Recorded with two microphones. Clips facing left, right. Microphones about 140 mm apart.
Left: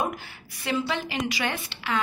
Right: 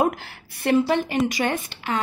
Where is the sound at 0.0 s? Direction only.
70° right (ahead or behind).